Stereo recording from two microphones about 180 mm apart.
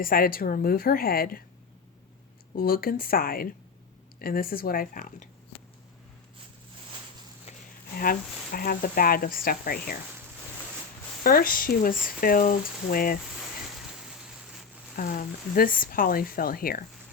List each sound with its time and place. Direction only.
0.0 s a woman's voice: 55° left (ahead or behind)
2.6 s a woman's voice: 55° left (ahead or behind)
7.5 s a sound: 35° left (ahead or behind)
8.5 s speech: 55° left (ahead or behind)
11.2 s speech: 55° left (ahead or behind)
14.9 s speech: 50° left (ahead or behind)